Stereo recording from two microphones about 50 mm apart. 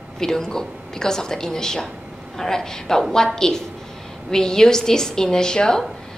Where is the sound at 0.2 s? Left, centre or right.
Centre.